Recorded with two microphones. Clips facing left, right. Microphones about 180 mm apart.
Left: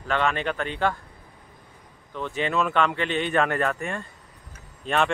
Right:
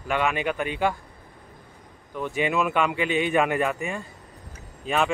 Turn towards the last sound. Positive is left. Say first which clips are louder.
# even
turn(degrees=-5)  # may be behind; listen again after turning